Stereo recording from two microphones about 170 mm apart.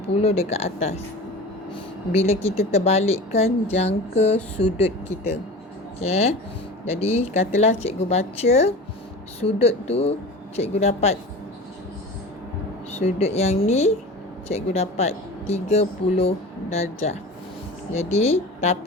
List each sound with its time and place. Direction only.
0.2 s speech: 35° left (ahead or behind)
6.0 s speech: 35° left (ahead or behind)
12.9 s speech: 40° left (ahead or behind)